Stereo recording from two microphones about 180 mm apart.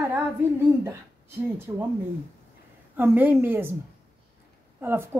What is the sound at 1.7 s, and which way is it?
Speech, 20° right (ahead or behind).